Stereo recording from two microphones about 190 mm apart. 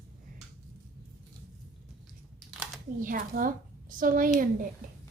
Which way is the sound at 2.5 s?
5° right (ahead or behind).